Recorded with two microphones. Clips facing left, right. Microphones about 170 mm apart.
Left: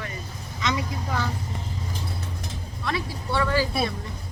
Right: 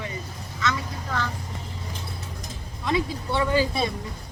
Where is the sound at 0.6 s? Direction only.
15° left (ahead or behind).